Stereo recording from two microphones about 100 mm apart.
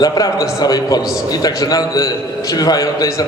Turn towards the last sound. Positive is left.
turn(degrees=40)  # may be behind; listen again after turning